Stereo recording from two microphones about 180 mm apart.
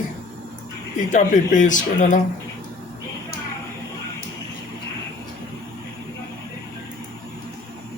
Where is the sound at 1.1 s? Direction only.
45° left (ahead or behind).